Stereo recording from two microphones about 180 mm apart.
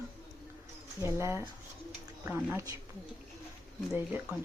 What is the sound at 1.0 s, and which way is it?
Speech, 15° right (ahead or behind).